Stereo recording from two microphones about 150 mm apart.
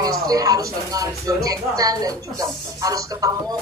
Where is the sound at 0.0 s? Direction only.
25° right (ahead or behind).